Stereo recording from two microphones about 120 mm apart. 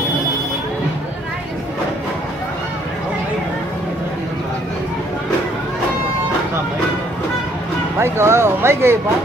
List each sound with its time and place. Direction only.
8.0 s speech: 20° right (ahead or behind)